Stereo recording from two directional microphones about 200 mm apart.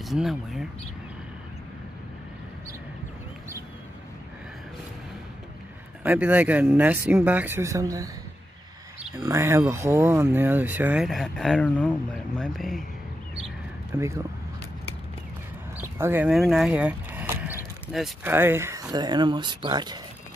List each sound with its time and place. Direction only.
0.0 s speech: centre (ahead or behind)
6.0 s speech: 10° right (ahead or behind)
9.1 s speech: 15° right (ahead or behind); by 12.8 s centre (ahead or behind)
13.9 s speech: 15° right (ahead or behind)
15.8 s a sound: 10° right (ahead or behind)
18.3 s speech: 10° right (ahead or behind)